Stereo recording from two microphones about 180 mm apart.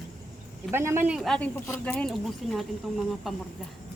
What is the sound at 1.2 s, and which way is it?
Speech, 5° left (ahead or behind).